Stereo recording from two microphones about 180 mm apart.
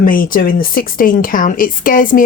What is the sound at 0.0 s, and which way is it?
Speech, 50° left (ahead or behind).